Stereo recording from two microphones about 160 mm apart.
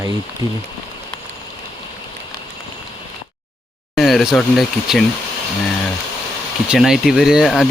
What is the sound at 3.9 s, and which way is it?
Speech, centre (ahead or behind).